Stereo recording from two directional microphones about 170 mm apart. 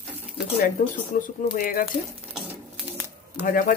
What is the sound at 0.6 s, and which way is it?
Speech, 50° left (ahead or behind).